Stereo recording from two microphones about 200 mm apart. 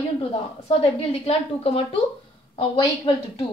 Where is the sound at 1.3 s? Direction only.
30° left (ahead or behind).